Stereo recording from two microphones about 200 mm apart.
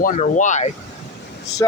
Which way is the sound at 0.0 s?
40° left (ahead or behind).